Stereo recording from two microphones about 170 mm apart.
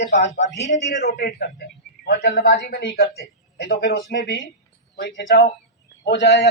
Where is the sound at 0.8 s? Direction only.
45° left (ahead or behind).